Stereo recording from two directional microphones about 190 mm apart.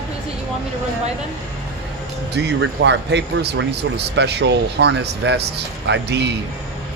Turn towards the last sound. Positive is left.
turn(degrees=-60)  # may be behind; listen again after turning